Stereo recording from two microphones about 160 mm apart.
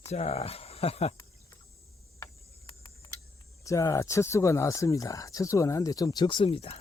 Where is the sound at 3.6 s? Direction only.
20° left (ahead or behind); by 6.7 s 35° left (ahead or behind).